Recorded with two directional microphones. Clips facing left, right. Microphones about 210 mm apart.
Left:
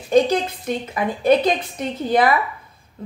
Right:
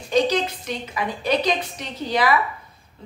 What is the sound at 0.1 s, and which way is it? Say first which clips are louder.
A woman's voice: left 4 dB; 55° left (ahead or behind).